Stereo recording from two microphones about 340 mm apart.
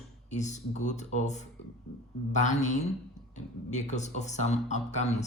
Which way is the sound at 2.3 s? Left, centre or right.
Left.